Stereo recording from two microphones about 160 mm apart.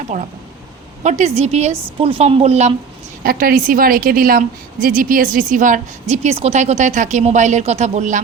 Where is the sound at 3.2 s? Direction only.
65° right (ahead or behind); by 8.2 s 50° right (ahead or behind).